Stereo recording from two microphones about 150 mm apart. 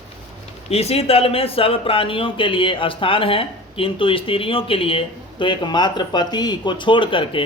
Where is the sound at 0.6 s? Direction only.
45° left (ahead or behind).